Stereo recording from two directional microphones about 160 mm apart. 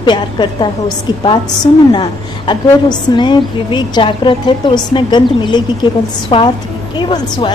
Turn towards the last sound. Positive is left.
turn(degrees=30)  # may be behind; listen again after turning